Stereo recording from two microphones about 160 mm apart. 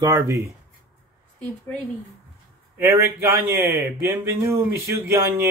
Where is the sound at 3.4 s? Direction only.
15° right (ahead or behind).